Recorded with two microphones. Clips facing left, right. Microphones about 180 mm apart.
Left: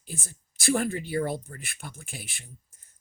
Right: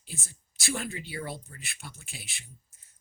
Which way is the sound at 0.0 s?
50° left (ahead or behind).